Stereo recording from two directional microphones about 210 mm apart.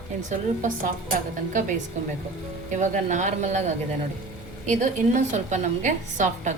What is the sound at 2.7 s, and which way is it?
Speech, 35° right (ahead or behind).